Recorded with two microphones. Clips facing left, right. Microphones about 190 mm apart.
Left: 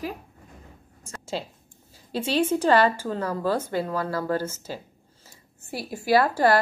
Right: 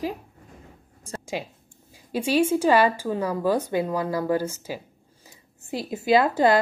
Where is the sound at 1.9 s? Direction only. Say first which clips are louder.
Right 3 dB; 10° right (ahead or behind).